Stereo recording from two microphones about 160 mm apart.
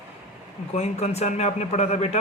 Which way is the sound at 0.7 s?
40° left (ahead or behind).